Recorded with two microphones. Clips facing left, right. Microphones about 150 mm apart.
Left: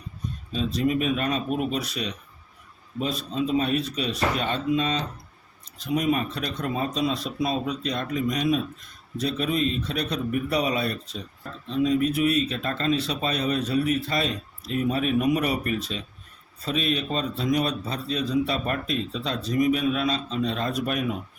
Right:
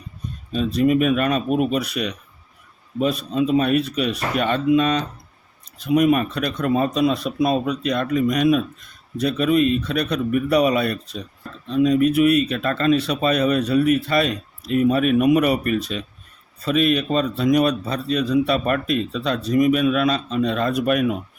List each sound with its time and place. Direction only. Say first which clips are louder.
0.5 s speech: right 6 dB; 60° right (ahead or behind)